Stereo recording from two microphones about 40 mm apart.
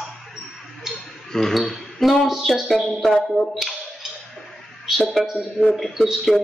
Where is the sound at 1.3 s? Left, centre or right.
Centre.